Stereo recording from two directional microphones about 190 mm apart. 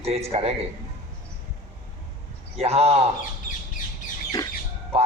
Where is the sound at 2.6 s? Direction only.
35° right (ahead or behind).